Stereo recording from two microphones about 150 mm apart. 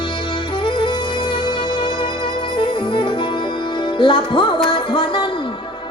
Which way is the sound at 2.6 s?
30° left (ahead or behind).